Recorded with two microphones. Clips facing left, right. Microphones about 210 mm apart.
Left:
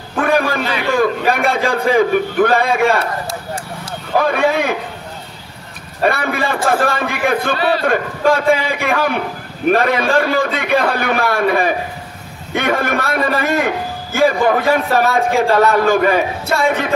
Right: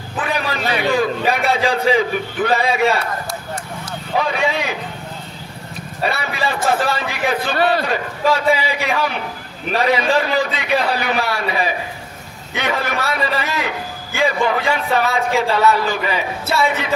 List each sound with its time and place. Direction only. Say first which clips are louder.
0.1 s a sound: left 7 dB; 50° left (ahead or behind)
0.8 s a man's voice: left 3 dB; 55° left (ahead or behind)
4.2 s a man's voice: left 5 dB; 55° left (ahead or behind)
6.0 s a man's voice: left 5 dB; 50° left (ahead or behind)